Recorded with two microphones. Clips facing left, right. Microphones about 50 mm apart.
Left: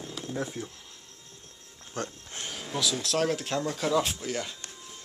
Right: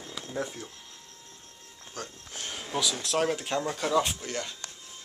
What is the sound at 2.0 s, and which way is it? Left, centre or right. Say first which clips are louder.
Speech: left 5 dB; left.